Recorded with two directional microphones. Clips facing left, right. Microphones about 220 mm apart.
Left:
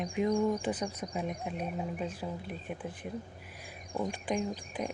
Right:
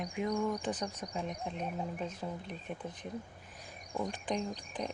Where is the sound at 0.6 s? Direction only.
10° left (ahead or behind).